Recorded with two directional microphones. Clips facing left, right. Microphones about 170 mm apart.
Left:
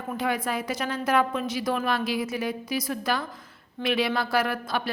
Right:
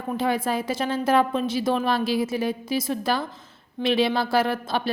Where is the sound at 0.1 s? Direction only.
30° right (ahead or behind).